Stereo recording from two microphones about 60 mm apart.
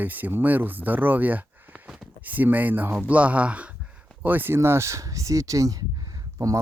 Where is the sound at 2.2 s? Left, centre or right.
Right.